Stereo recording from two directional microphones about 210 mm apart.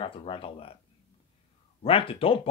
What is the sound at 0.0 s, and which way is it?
Speech, 25° left (ahead or behind).